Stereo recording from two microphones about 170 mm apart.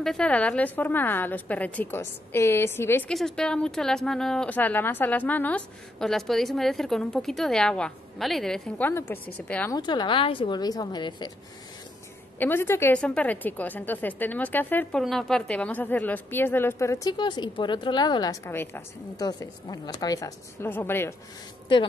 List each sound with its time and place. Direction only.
0.0 s a woman's voice: 5° left (ahead or behind)
3.1 s speech: 5° left (ahead or behind)
9.7 s speech: 25° left (ahead or behind)
12.4 s a woman's voice: 10° left (ahead or behind)